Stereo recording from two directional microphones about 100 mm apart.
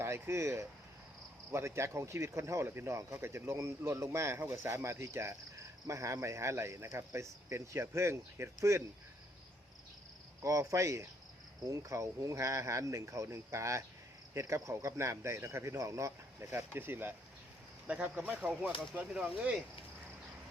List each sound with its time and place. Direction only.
0.0 s speech: 25° right (ahead or behind)
10.4 s speech: 35° right (ahead or behind); by 19.6 s 10° right (ahead or behind)